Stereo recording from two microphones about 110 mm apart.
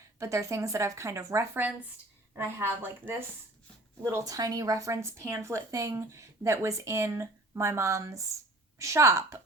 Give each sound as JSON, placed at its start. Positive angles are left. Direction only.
{"t": 0.2, "sound": "a woman's voice", "side_deg": -25}
{"t": 1.5, "sound": "a woman's voice", "side_deg": -15}